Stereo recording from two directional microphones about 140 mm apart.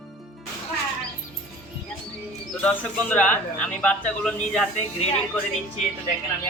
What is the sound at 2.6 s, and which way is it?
A man's voice, 10° left (ahead or behind).